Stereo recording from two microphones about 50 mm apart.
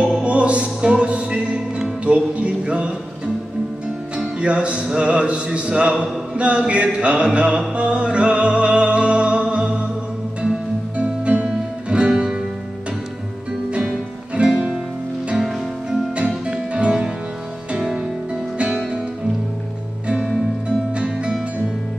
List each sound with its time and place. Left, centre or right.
0.2 s music: right
4.4 s music: right
11.0 s music: right
14.3 s music: centre
16.4 s music: centre
20.6 s music: right